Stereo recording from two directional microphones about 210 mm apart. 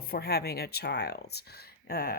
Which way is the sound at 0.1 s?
50° left (ahead or behind).